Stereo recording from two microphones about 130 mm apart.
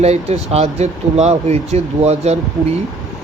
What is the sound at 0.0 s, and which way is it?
Speech, 55° right (ahead or behind).